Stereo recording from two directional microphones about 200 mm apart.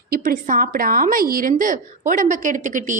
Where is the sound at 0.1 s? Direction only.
45° right (ahead or behind).